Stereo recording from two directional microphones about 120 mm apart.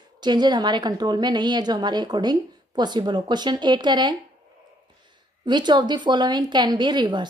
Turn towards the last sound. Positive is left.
turn(degrees=-35)  # may be behind; listen again after turning